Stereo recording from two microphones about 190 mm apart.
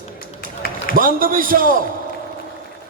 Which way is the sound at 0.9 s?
50° right (ahead or behind).